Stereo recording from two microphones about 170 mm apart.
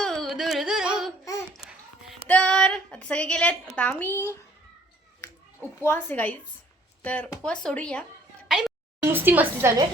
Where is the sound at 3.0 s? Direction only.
5° left (ahead or behind).